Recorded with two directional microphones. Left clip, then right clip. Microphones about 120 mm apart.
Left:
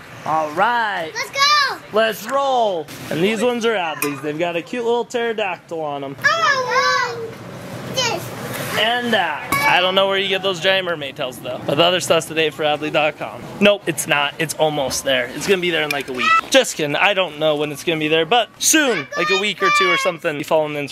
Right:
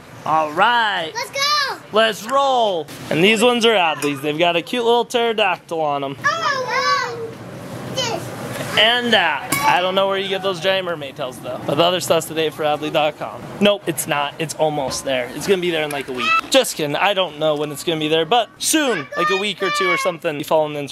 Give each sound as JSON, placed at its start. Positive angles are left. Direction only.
{"t": 0.6, "sound": "a child's voice", "side_deg": 0}
{"t": 2.3, "sound": "speech", "side_deg": -5}
{"t": 3.1, "sound": "speech", "side_deg": -25}
{"t": 6.2, "sound": "children playing", "side_deg": 15}
{"t": 7.9, "sound": "children playing", "side_deg": 15}
{"t": 8.7, "sound": "speech", "side_deg": -25}
{"t": 9.7, "sound": "speech", "side_deg": 5}
{"t": 17.9, "sound": "speech", "side_deg": -15}
{"t": 18.6, "sound": "speech", "side_deg": 5}